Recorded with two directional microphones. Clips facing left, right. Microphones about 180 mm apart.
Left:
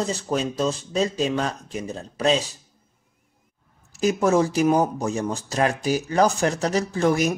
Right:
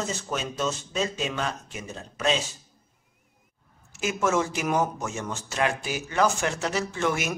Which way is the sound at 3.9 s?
35° left (ahead or behind).